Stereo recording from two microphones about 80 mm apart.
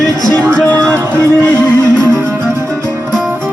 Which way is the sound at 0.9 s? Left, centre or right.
Right.